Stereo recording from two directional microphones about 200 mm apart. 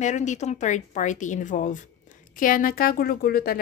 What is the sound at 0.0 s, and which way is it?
Speech, 35° left (ahead or behind).